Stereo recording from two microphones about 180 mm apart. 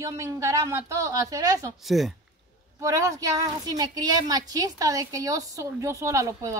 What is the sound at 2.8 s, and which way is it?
A woman's voice, 20° right (ahead or behind).